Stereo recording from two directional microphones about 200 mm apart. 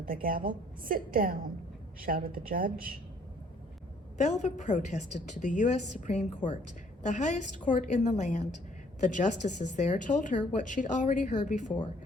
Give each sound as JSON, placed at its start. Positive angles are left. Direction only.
{"t": 0.0, "sound": "a woman's voice", "side_deg": -45}
{"t": 4.2, "sound": "a woman's voice", "side_deg": 35}